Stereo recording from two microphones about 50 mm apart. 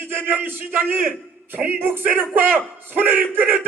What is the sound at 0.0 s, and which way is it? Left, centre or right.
Speech, right.